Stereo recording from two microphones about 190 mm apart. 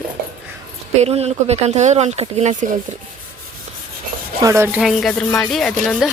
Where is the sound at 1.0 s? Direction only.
35° right (ahead or behind).